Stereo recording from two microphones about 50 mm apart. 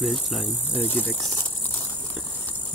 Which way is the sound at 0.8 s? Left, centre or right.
Left.